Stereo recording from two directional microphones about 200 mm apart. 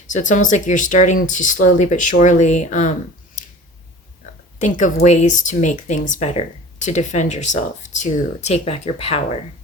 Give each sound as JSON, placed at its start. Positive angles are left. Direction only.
{"t": 0.1, "sound": "speech", "side_deg": 40}
{"t": 3.4, "sound": "scissors", "side_deg": 40}
{"t": 5.0, "sound": "speech", "side_deg": 35}